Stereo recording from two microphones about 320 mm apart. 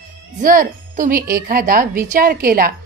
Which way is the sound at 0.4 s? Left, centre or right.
Right.